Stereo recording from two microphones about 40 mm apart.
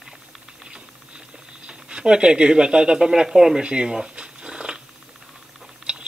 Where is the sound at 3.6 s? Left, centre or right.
Right.